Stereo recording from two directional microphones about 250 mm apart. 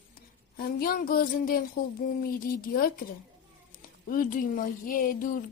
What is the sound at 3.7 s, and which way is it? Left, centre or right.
Speech, left.